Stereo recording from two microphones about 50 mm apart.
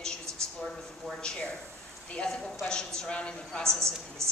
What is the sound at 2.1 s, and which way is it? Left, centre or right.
A woman's voice, centre.